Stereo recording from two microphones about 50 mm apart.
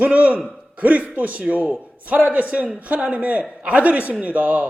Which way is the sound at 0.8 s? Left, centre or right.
Right.